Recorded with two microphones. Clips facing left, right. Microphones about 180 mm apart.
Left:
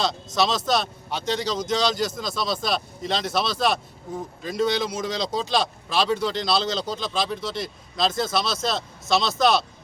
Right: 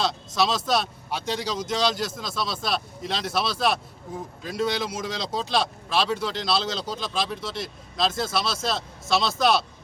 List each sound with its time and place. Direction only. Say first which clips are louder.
0.3 s speech: left 1 dB; 5° right (ahead or behind)